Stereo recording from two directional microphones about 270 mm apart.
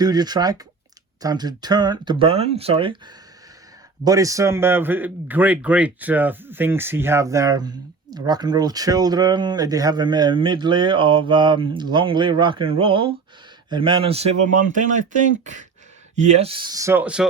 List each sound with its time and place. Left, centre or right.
0.0 s a man's voice: centre
4.0 s a man's voice: centre; by 15.0 s right
16.1 s a man's voice: right; by 17.2 s centre